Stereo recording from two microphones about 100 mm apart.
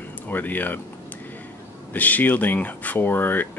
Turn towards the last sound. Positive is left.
turn(degrees=20)  # may be behind; listen again after turning